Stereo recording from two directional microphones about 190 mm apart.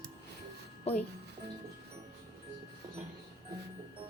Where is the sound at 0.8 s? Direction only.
35° left (ahead or behind).